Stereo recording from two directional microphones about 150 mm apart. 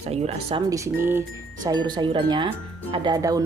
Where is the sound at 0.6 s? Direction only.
20° right (ahead or behind).